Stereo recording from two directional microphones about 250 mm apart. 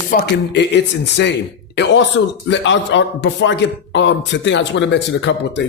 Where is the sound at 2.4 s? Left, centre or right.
Left.